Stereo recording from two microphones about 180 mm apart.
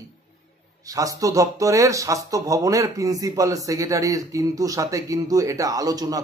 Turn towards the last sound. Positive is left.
turn(degrees=-20)  # may be behind; listen again after turning